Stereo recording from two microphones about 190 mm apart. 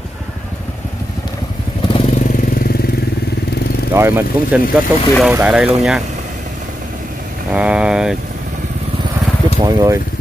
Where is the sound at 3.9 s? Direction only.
10° right (ahead or behind).